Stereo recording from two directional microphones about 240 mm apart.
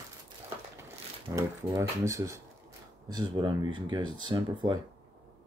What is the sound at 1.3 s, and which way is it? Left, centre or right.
Speech, centre.